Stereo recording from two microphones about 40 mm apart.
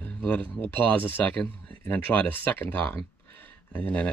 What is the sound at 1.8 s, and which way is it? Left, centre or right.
Speech, left.